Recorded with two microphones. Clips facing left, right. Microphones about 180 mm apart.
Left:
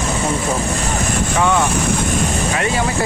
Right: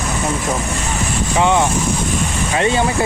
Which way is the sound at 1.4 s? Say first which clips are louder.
Right 2 dB; 20° right (ahead or behind).